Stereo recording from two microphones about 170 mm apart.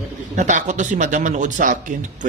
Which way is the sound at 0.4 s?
45° right (ahead or behind).